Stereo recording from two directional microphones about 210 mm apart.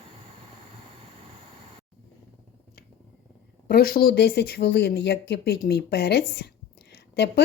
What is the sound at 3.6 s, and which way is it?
Speech, 45° left (ahead or behind).